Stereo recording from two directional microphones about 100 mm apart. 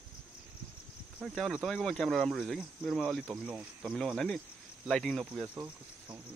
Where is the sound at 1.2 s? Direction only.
Centre (ahead or behind).